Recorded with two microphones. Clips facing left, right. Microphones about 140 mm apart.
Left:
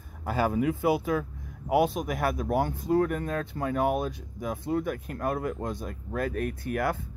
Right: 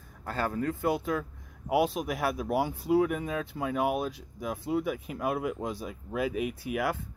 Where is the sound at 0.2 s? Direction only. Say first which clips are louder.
Left 5 dB; 10° left (ahead or behind).